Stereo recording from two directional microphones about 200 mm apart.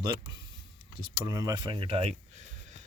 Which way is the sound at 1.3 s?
15° right (ahead or behind).